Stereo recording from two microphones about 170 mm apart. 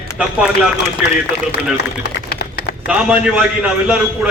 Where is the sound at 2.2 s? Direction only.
75° left (ahead or behind).